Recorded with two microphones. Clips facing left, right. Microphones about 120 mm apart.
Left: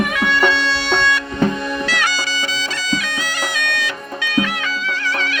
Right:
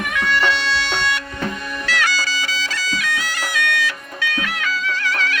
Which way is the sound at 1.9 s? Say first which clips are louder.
Left 1 dB; 20° left (ahead or behind).